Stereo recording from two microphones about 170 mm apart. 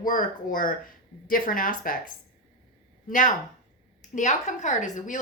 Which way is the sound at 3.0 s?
50° left (ahead or behind).